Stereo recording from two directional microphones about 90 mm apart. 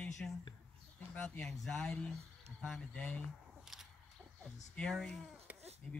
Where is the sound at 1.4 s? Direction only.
10° left (ahead or behind).